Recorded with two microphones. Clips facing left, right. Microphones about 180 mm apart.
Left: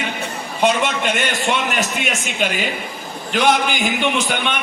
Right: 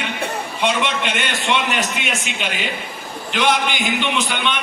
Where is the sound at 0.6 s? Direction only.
45° left (ahead or behind).